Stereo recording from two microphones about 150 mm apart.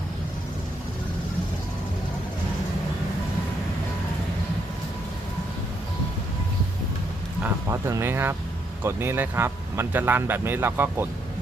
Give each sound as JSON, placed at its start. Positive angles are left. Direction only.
{"t": 7.4, "sound": "vehicle", "side_deg": -20}
{"t": 8.8, "sound": "speech", "side_deg": -15}